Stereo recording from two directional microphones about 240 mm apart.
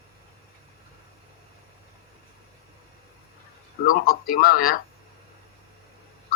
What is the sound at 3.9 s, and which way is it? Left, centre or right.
Speech, left.